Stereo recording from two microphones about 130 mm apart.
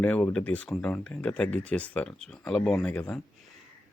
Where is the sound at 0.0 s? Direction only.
10° left (ahead or behind).